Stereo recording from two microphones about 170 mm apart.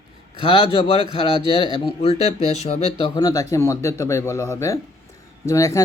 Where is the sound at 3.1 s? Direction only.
20° left (ahead or behind).